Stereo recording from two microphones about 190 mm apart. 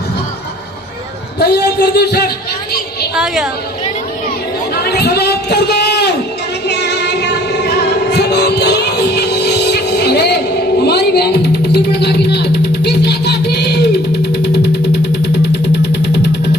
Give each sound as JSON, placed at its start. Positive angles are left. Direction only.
{"t": 1.4, "sound": "speech", "side_deg": 55}
{"t": 3.2, "sound": "a woman's voice", "side_deg": -5}
{"t": 4.9, "sound": "a sound", "side_deg": 60}
{"t": 6.7, "sound": "music", "side_deg": 60}